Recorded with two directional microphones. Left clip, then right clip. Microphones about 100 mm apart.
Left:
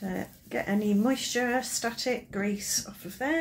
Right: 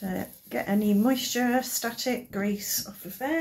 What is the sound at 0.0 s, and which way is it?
Speech, 10° left (ahead or behind).